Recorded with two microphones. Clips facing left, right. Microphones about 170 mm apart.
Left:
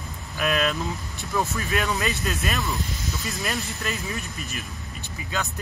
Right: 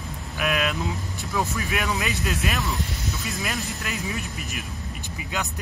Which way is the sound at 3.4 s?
Centre (ahead or behind).